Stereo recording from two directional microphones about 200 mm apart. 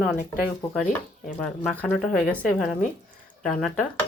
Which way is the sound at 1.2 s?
5° left (ahead or behind).